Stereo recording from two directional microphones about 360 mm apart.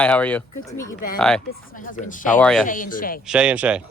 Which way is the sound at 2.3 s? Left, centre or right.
Centre.